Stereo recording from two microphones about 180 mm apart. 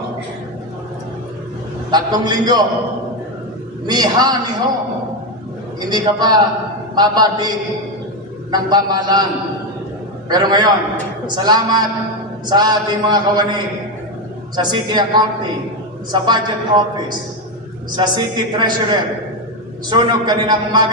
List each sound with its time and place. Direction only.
1.9 s a woman's voice: 25° right (ahead or behind)
3.8 s a woman's voice: 25° right (ahead or behind)
5.8 s a woman's voice: 20° right (ahead or behind)
10.3 s a woman's voice: 20° right (ahead or behind)